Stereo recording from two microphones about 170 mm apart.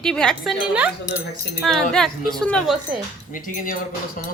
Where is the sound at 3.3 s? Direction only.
55° left (ahead or behind).